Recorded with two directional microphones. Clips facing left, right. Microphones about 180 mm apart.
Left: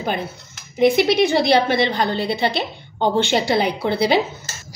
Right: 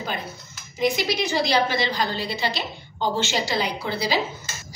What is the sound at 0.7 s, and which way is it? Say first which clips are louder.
A woman's voice: left 8 dB; 60° left (ahead or behind).